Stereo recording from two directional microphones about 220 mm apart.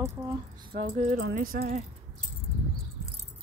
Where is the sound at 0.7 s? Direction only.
30° right (ahead or behind).